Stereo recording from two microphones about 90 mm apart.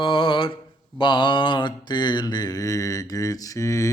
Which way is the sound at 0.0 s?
70° left (ahead or behind).